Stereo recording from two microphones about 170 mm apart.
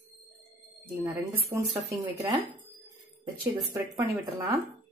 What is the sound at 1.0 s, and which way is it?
A woman's voice, 15° right (ahead or behind).